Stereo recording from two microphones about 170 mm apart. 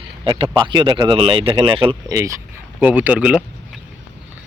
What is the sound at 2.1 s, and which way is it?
Speech, 20° right (ahead or behind).